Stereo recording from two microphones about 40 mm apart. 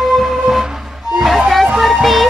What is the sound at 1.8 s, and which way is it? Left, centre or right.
Music, centre.